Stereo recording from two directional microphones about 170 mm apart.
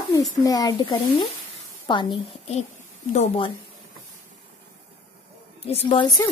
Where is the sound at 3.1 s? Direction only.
35° left (ahead or behind).